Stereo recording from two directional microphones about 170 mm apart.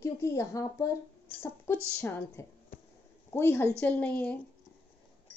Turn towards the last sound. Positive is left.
turn(degrees=10)  # may be behind; listen again after turning